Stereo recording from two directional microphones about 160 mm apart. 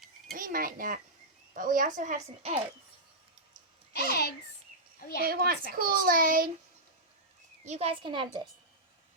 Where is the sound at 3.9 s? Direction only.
85° left.